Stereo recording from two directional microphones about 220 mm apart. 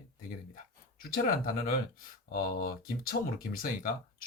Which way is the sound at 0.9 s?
40° left (ahead or behind).